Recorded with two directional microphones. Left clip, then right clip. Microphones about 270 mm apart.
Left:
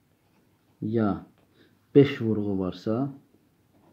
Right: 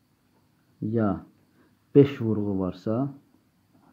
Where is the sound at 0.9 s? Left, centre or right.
Right.